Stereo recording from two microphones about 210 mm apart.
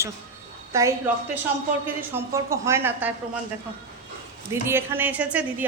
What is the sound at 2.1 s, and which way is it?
A woman's voice, 10° right (ahead or behind).